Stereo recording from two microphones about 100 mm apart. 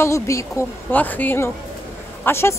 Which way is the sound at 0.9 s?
15° left (ahead or behind).